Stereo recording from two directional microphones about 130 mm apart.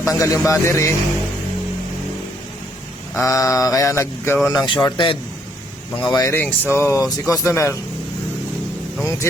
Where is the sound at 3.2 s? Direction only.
25° left (ahead or behind).